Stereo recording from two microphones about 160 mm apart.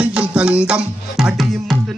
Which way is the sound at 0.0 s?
10° right (ahead or behind).